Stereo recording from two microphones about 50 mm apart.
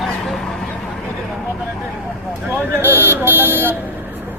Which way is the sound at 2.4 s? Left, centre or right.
Right.